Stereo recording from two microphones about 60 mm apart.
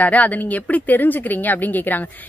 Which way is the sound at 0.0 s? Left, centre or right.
Left.